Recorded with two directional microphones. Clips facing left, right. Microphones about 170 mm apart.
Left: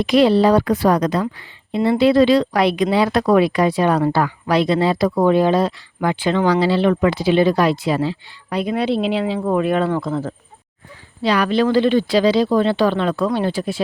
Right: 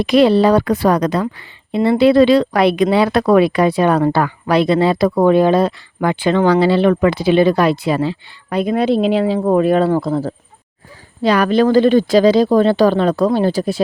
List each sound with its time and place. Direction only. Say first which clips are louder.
0.0 s speech: right 2 dB; 60° right (ahead or behind); by 10.3 s 35° right (ahead or behind)
11.2 s speech: right 4 dB; 45° right (ahead or behind)